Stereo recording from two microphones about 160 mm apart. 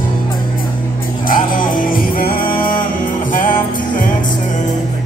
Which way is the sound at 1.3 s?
60° left (ahead or behind).